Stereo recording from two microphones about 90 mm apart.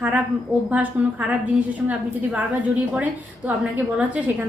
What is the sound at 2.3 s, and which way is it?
A woman's voice, 15° right (ahead or behind).